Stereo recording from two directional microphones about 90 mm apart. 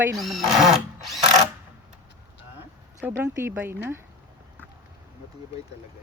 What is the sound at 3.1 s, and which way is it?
Speech, 25° right (ahead or behind).